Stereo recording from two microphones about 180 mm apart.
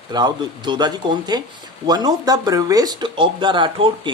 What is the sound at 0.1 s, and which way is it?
Speech, 25° right (ahead or behind).